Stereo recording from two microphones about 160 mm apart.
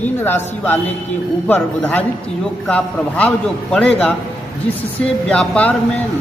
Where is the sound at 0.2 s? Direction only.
10° left (ahead or behind).